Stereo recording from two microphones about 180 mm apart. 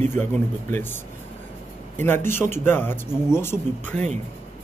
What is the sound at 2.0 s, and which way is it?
Speech, 10° left (ahead or behind).